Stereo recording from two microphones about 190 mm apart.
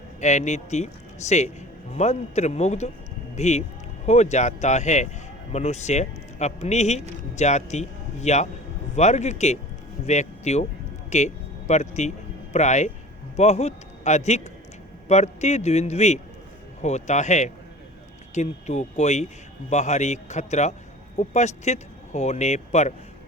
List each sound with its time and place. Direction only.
0.2 s a man's voice: 40° left (ahead or behind)